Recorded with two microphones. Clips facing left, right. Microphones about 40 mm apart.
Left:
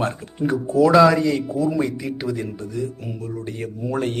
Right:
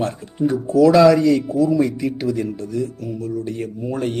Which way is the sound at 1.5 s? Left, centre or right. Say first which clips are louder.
Right 4 dB; centre.